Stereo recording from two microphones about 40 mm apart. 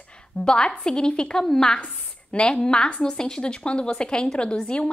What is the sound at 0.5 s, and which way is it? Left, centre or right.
A woman's voice, centre.